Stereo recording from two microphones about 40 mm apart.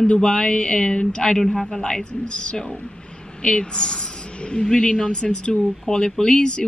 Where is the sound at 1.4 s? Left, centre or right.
Centre.